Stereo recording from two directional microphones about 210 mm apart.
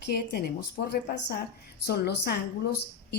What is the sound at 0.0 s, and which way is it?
A woman's voice, 50° left (ahead or behind).